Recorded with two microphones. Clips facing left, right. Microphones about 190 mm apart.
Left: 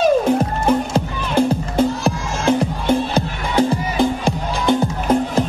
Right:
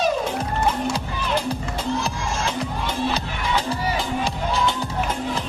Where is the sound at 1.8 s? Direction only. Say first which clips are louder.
Left 8 dB; 55° left (ahead or behind).